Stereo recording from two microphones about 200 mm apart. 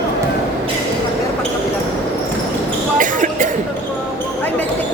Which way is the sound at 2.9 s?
40° right (ahead or behind).